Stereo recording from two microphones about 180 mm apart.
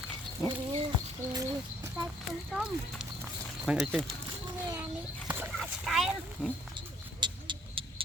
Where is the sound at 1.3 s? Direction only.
15° right (ahead or behind).